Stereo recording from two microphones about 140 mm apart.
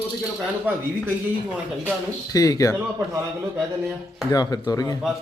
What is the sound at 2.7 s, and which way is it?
Speech, 20° right (ahead or behind).